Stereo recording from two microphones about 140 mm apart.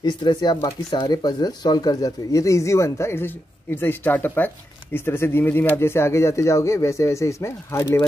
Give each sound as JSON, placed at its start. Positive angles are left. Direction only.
{"t": 0.0, "sound": "speech", "side_deg": 30}